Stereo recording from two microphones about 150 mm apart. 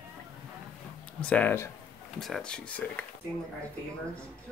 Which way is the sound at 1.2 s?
10° left (ahead or behind).